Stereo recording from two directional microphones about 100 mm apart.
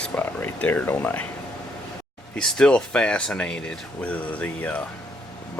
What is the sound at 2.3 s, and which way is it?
Speech, 5° left (ahead or behind).